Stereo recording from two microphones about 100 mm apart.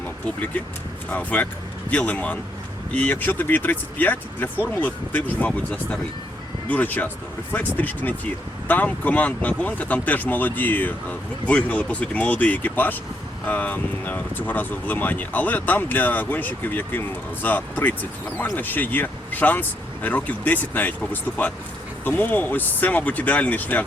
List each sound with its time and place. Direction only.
1.1 s speech: 15° left (ahead or behind)